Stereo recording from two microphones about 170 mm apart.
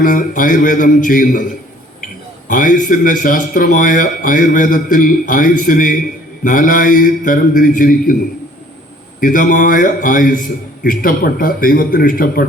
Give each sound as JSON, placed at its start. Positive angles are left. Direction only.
{"t": 0.0, "sound": "a man's voice", "side_deg": 50}
{"t": 2.5, "sound": "a man's voice", "side_deg": 50}
{"t": 9.2, "sound": "a man's voice", "side_deg": 50}